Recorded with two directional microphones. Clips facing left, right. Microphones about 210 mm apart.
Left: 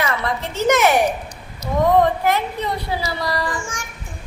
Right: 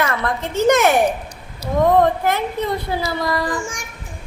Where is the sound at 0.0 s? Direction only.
55° right (ahead or behind).